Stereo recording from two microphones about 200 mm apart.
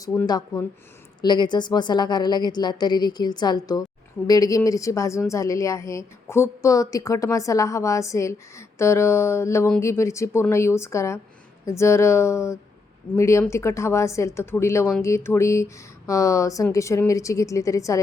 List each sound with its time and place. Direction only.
0.0 s a woman's voice: 15° left (ahead or behind)